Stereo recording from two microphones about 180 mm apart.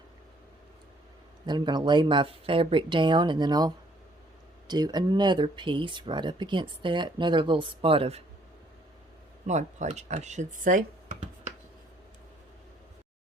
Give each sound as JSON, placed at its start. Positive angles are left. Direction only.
{"t": 1.5, "sound": "speech", "side_deg": -25}
{"t": 4.7, "sound": "speech", "side_deg": -20}
{"t": 9.5, "sound": "speech", "side_deg": -40}